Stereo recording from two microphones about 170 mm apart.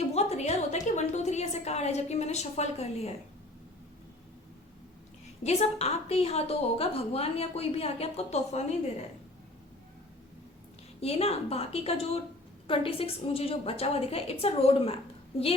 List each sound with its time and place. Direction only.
0.0 s a sound: 40° left (ahead or behind)
5.4 s a woman's voice: 40° left (ahead or behind)
11.0 s a woman's voice: 35° left (ahead or behind)